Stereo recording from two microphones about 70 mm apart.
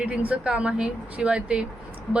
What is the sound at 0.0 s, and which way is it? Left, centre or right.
Speech, right.